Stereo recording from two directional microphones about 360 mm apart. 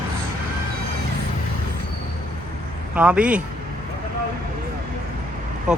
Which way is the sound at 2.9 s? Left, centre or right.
Centre.